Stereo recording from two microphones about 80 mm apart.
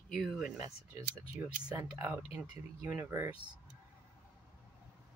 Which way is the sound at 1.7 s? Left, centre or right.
Right.